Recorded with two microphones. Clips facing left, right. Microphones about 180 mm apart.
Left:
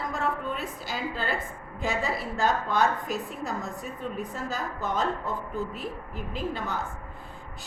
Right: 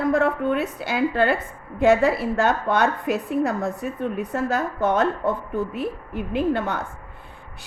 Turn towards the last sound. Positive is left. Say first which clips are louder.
# right 9 dB
turn(degrees=-65)  # may be behind; listen again after turning